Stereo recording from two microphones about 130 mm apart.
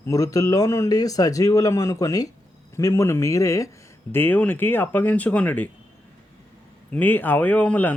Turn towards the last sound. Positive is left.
turn(degrees=10)  # may be behind; listen again after turning